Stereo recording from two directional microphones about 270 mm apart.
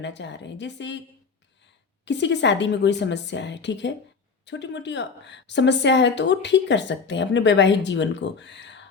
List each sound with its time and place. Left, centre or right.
0.0 s a woman's voice: left
2.0 s a woman's voice: left